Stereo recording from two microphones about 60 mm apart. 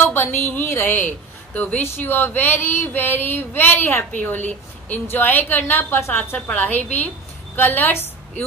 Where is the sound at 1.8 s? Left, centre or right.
Left.